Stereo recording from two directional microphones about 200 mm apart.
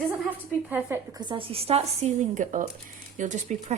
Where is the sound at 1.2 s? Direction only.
25° right (ahead or behind).